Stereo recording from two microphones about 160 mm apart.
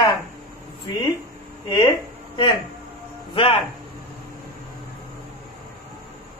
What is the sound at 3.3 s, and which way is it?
Speech, 35° left (ahead or behind).